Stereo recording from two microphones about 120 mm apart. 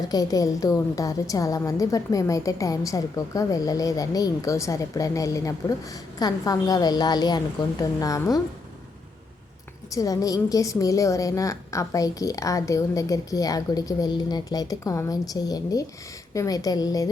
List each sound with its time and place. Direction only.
0.1 s a woman's voice: 30° left (ahead or behind)
9.9 s a woman's voice: 30° left (ahead or behind)